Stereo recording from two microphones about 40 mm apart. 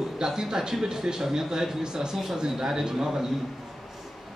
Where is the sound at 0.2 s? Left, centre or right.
Centre.